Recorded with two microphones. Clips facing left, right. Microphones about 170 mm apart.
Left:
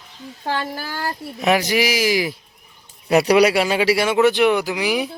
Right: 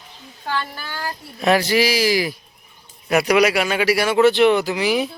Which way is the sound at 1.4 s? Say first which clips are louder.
Right 1 dB; 15° left (ahead or behind).